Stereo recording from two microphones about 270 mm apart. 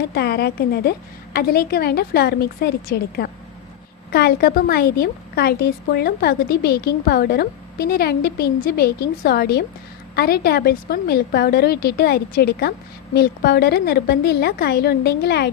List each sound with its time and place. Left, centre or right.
0.1 s a woman's voice: left